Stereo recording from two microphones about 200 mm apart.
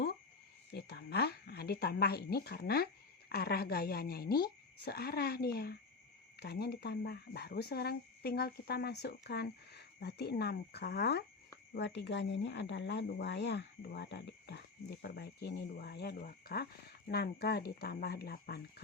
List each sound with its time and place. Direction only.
0.7 s speech: 55° left (ahead or behind)